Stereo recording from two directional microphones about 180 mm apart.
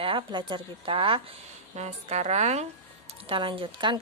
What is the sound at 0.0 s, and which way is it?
A woman's voice, 25° right (ahead or behind).